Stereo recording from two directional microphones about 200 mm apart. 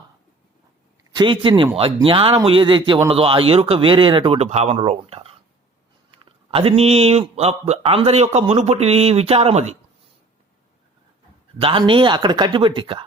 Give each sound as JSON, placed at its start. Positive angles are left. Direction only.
{"t": 1.1, "sound": "a man's voice", "side_deg": -25}
{"t": 11.6, "sound": "a man's voice", "side_deg": -25}